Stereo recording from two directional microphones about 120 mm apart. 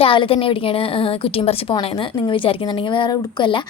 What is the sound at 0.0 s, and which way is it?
Speech, 50° left (ahead or behind).